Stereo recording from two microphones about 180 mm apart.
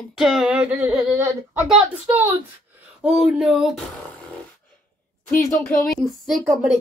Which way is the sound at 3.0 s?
5° right (ahead or behind).